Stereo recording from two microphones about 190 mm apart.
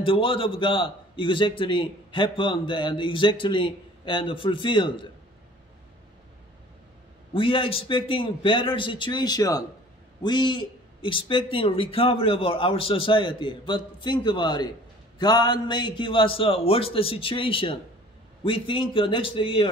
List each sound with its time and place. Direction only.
0.0 s a man's voice: 25° left (ahead or behind)
7.3 s a man's voice: 25° left (ahead or behind)